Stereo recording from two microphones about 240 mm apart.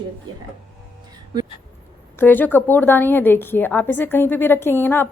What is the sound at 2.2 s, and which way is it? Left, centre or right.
A woman's voice, centre.